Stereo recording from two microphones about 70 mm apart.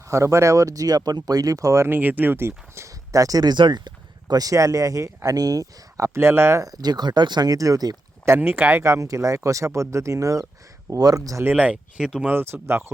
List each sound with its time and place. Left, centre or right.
0.1 s speech: right
1.9 s speech: right
2.9 s speech: right
6.1 s speech: right
6.6 s speech: right
8.4 s speech: right
8.8 s speech: right
10.9 s speech: right
11.4 s speech: centre
12.2 s speech: right